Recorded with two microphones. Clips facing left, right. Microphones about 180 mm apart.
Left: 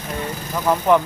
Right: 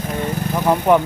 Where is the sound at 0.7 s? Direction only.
15° right (ahead or behind).